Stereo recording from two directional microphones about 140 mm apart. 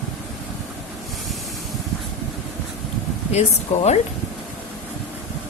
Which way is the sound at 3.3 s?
55° left (ahead or behind).